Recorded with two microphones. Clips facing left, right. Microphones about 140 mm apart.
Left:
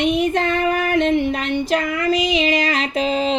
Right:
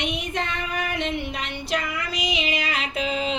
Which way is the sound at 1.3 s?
50° left (ahead or behind).